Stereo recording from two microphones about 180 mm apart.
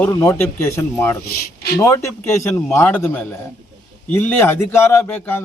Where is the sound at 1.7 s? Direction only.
15° left (ahead or behind).